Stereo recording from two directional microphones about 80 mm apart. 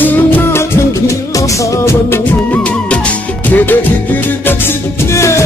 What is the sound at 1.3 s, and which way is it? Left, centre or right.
Music, left.